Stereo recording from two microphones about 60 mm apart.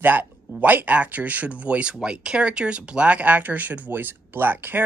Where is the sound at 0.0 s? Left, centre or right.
Right.